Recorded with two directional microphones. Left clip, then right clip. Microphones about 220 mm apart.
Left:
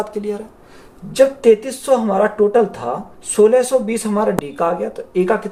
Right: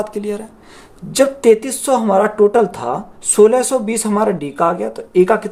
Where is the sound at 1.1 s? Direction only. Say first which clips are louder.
Even; 50° right (ahead or behind).